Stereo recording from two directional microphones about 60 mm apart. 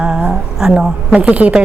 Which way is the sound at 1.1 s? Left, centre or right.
Right.